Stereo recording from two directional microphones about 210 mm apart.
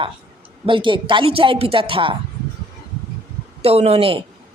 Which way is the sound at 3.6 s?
30° right (ahead or behind).